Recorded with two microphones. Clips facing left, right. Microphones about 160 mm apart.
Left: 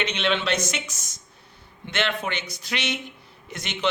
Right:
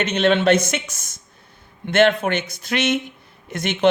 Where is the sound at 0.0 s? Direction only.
45° right (ahead or behind).